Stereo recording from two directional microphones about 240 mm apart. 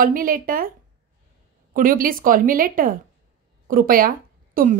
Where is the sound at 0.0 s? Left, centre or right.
Right.